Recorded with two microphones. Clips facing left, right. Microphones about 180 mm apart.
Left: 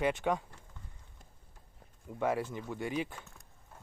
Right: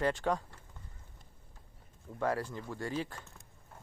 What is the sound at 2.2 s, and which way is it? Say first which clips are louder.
Speech: left 1 dB; 20° left (ahead or behind).